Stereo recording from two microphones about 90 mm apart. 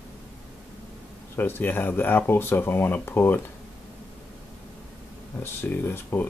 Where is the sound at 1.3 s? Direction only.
20° left (ahead or behind).